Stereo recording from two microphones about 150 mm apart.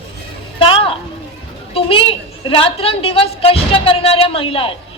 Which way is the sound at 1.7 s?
35° left (ahead or behind).